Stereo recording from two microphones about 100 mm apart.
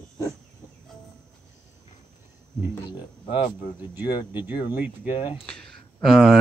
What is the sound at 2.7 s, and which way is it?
Speech, 45° left (ahead or behind).